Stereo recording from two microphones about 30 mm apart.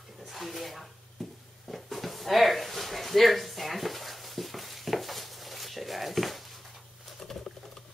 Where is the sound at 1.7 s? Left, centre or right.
Centre.